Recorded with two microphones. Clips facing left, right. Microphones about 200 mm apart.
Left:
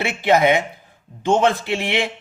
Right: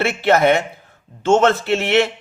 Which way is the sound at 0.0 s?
15° left (ahead or behind).